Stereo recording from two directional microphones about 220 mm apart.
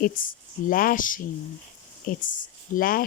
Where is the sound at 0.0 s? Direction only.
40° left (ahead or behind).